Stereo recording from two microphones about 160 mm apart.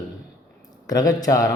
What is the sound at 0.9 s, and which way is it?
Speech, 25° left (ahead or behind).